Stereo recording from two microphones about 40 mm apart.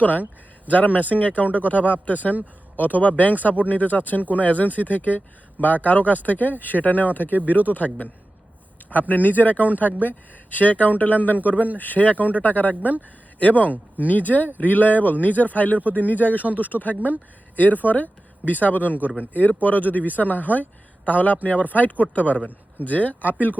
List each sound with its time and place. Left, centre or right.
0.7 s speech: left
7.3 s speech: right
8.9 s speech: left
11.3 s speech: right
11.8 s speech: left
13.7 s speech: right
14.1 s speech: left
18.9 s speech: right
19.2 s speech: left